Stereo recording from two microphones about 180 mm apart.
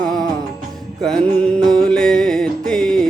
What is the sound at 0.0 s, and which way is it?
Music, centre (ahead or behind).